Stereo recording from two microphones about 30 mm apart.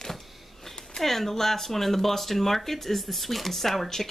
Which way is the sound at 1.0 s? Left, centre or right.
Centre.